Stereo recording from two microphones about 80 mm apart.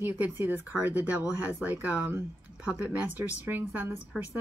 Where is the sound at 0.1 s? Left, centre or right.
Right.